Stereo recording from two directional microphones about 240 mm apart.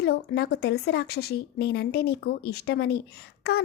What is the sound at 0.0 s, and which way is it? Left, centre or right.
Speech, left.